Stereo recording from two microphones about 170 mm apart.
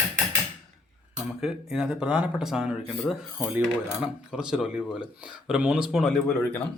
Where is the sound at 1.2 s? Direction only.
5° right (ahead or behind).